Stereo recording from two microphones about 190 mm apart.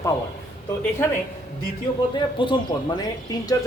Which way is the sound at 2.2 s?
25° left (ahead or behind).